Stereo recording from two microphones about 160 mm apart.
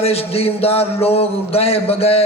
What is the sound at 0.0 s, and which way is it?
A man's voice, 40° left (ahead or behind).